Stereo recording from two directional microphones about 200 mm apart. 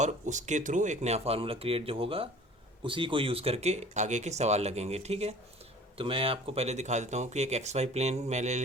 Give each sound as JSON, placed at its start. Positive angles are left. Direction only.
{"t": 0.0, "sound": "speech", "side_deg": -35}